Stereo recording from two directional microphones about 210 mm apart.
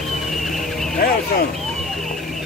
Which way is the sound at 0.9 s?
45° left (ahead or behind).